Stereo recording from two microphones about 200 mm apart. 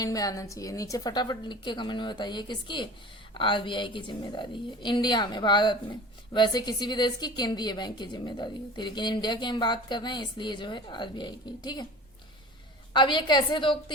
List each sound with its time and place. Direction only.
0.0 s a woman's voice: 15° left (ahead or behind)
12.9 s a woman's voice: 25° left (ahead or behind)